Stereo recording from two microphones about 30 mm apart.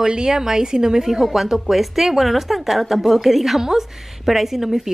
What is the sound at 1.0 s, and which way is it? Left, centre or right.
A woman's voice, centre.